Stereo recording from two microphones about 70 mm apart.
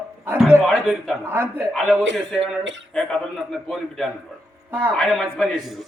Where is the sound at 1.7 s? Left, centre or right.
Centre.